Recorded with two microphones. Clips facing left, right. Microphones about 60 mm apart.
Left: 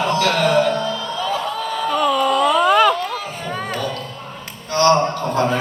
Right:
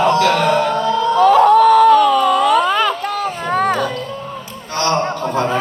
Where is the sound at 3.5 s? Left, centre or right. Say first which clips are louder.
Right 10 dB; right.